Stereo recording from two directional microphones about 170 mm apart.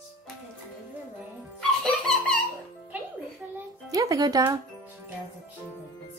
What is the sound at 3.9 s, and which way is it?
Speech, 20° right (ahead or behind).